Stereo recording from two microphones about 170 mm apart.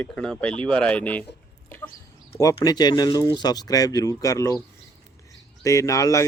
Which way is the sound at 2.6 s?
25° left (ahead or behind).